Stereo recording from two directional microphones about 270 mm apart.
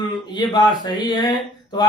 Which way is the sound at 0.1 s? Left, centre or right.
Centre.